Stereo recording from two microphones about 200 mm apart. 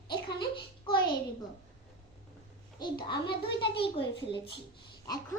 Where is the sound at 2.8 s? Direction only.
20° left (ahead or behind).